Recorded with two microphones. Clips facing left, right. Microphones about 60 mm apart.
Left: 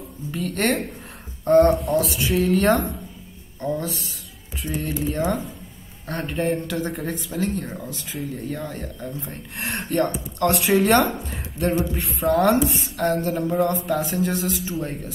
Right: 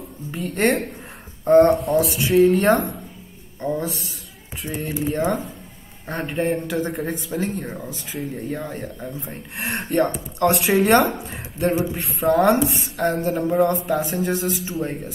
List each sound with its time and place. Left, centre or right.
0.4 s speech: centre
2.0 s speech: centre
3.6 s speech: centre